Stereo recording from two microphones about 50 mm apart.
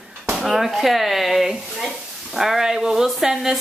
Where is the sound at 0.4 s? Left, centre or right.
Centre.